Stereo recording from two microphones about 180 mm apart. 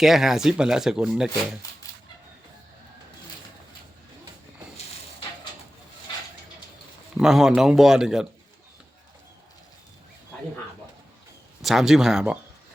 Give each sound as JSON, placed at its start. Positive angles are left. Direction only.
{"t": 0.0, "sound": "speech", "side_deg": 0}
{"t": 7.2, "sound": "speech", "side_deg": 0}
{"t": 11.6, "sound": "speech", "side_deg": 0}